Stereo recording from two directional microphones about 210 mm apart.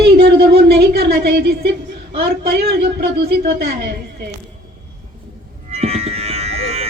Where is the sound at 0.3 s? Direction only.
50° right (ahead or behind).